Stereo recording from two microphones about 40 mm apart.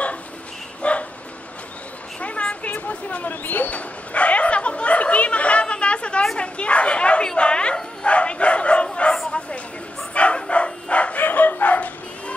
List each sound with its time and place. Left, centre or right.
0.8 s dog: left
2.1 s a sound: left
2.9 s speech: left
3.4 s speech: left
3.7 s a sound: left
6.3 s bow-wow: left
10.5 s dog: left
11.1 s chicken: left